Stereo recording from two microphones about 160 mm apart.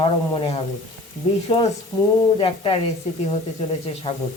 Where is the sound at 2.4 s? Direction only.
35° left (ahead or behind).